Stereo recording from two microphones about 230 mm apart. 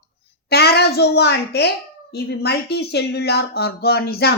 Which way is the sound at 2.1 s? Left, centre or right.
Left.